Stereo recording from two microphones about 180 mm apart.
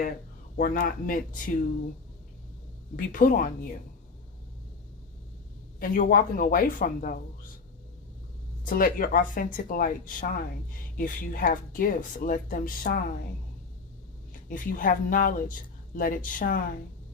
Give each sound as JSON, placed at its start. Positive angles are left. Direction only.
{"t": 0.5, "sound": "speech", "side_deg": 50}
{"t": 2.9, "sound": "speech", "side_deg": 50}
{"t": 5.8, "sound": "speech", "side_deg": 50}
{"t": 8.6, "sound": "speech", "side_deg": 50}
{"t": 14.5, "sound": "speech", "side_deg": 50}